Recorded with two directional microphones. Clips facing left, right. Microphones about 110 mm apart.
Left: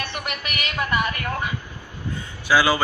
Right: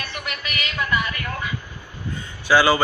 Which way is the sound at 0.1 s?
50° left (ahead or behind).